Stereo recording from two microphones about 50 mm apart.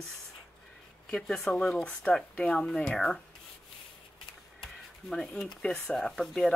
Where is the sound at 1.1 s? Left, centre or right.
Centre.